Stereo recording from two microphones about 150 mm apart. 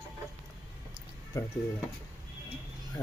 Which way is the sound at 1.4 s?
20° left (ahead or behind).